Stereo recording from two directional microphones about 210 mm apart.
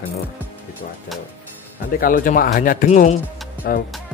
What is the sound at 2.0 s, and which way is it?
Speech, 40° left (ahead or behind).